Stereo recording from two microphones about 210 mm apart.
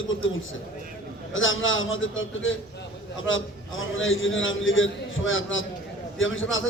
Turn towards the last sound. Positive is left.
turn(degrees=70)  # may be behind; listen again after turning